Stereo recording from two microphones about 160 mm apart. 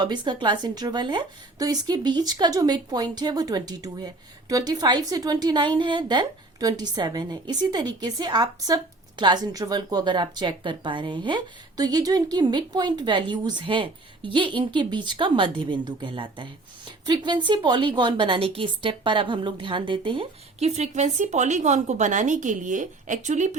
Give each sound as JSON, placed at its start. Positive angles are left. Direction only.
{"t": 0.0, "sound": "a woman's voice", "side_deg": -30}